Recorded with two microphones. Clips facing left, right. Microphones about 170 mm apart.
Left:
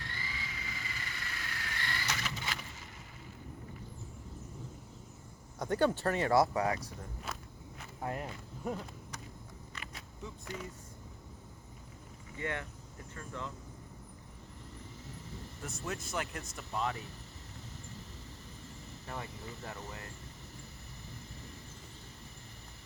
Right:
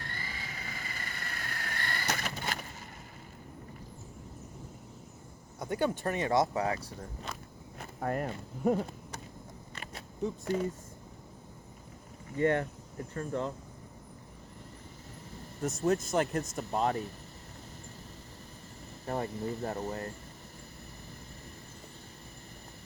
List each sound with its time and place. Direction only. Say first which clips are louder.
0.0 s vehicle: right 2 dB; 50° right (ahead or behind)
5.5 s speech: left 1 dB; 10° right (ahead or behind); by 6.9 s 30° right (ahead or behind)
7.8 s walk: right 6 dB; 50° right (ahead or behind)
8.3 s speech: right 9 dB; 40° right (ahead or behind)
9.7 s vehicle: right 6 dB; 35° right (ahead or behind)
12.4 s speech: right 11 dB; 40° right (ahead or behind)
15.6 s speech: right 12 dB; 40° right (ahead or behind)
19.0 s speech: right 10 dB; 40° right (ahead or behind)